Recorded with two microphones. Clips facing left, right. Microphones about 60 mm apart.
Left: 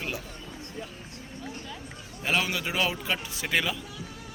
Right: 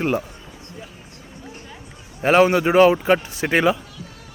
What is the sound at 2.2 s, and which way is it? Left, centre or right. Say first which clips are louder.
A man's voice: right 13 dB; right.